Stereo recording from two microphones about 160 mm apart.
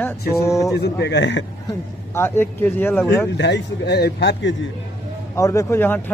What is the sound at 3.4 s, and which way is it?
Speech, 90° left.